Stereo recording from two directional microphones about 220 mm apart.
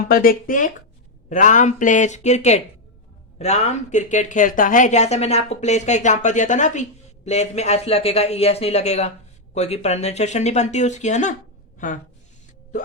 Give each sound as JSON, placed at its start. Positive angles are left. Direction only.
{"t": 0.0, "sound": "speech", "side_deg": 40}